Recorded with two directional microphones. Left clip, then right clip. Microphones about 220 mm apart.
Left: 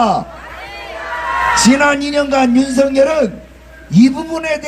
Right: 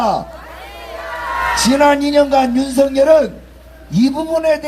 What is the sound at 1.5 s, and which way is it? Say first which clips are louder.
A man's voice: right 2 dB; 30° left (ahead or behind).